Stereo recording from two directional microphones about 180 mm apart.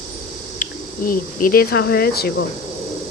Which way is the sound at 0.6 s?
50° left (ahead or behind).